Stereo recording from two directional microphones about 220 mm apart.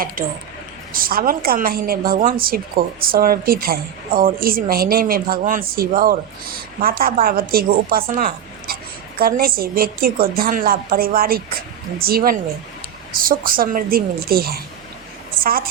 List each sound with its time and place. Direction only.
0.2 s a woman's voice: 40° right (ahead or behind)